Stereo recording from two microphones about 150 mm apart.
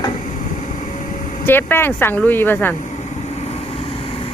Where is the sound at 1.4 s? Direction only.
15° left (ahead or behind).